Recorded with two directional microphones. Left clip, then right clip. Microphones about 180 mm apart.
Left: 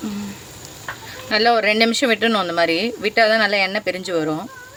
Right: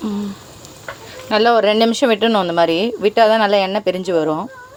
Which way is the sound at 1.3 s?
15° right (ahead or behind).